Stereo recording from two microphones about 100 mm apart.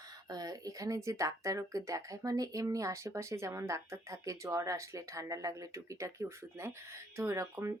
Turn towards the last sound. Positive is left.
turn(degrees=-30)  # may be behind; listen again after turning